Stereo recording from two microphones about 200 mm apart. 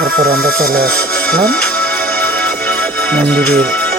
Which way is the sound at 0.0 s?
50° right (ahead or behind).